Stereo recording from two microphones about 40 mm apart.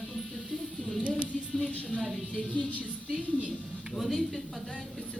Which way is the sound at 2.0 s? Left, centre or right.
Centre.